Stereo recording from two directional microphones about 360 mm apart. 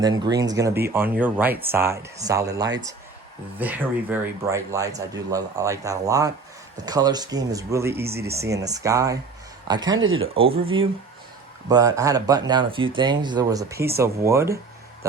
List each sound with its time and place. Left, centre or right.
0.0 s speech: centre
10.0 s speech: right
10.3 s speech: centre